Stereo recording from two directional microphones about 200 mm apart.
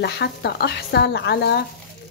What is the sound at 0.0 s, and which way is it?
Speech, 55° left (ahead or behind).